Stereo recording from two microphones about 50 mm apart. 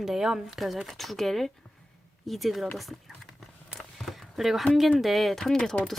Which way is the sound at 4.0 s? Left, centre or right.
Centre.